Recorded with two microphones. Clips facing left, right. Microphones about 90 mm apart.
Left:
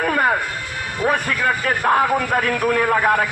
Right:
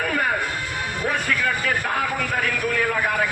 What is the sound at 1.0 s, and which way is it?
Music, 60° left (ahead or behind).